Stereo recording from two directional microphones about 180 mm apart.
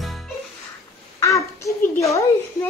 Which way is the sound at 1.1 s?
15° left (ahead or behind).